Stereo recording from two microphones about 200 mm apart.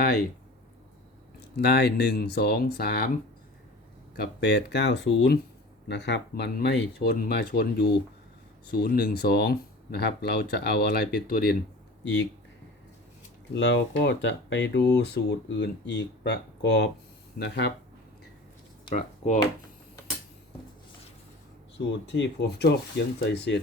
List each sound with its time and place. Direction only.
1.5 s speech: 55° left (ahead or behind)
4.2 s speech: 55° left (ahead or behind)
12.0 s speech: 65° left (ahead or behind)
13.5 s speech: 60° left (ahead or behind)
18.9 s speech: 35° left (ahead or behind)
21.8 s speech: 60° left (ahead or behind)